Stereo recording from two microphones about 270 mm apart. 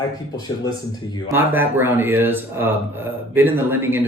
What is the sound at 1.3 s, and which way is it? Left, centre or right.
Speech, centre.